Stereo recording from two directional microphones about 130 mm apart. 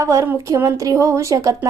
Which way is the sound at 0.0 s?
25° right (ahead or behind).